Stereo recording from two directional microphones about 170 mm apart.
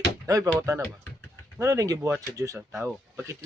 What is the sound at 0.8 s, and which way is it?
Music, 10° left (ahead or behind).